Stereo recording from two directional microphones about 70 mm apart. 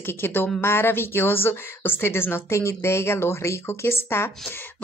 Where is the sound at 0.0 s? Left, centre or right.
Left.